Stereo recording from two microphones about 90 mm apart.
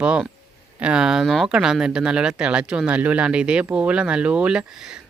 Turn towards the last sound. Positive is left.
turn(degrees=-5)  # may be behind; listen again after turning